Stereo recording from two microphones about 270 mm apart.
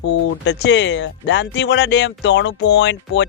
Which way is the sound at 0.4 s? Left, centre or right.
Left.